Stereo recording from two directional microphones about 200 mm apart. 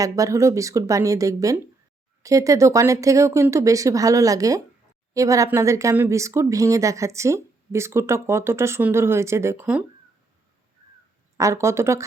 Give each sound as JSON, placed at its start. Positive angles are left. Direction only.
{"t": 0.0, "sound": "speech", "side_deg": -15}
{"t": 11.3, "sound": "speech", "side_deg": -15}